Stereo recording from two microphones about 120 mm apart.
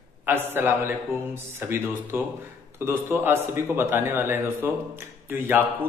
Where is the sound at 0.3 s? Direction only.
20° right (ahead or behind).